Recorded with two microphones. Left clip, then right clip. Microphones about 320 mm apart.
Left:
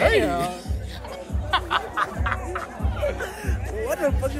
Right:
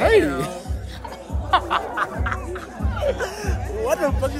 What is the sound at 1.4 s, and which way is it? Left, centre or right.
Music, centre.